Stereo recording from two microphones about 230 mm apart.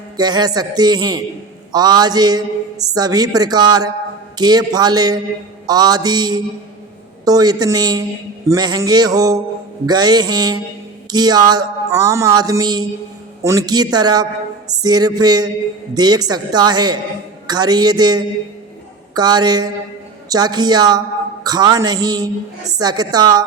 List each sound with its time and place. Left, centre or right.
0.2 s speech: centre